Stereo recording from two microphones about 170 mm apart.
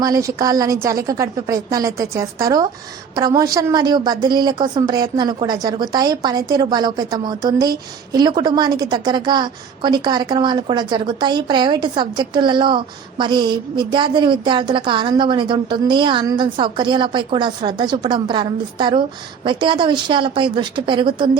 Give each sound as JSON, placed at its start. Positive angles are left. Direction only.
{"t": 0.0, "sound": "a woman's voice", "side_deg": -20}